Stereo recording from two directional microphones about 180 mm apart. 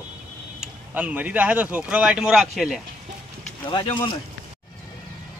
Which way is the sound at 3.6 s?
25° left (ahead or behind).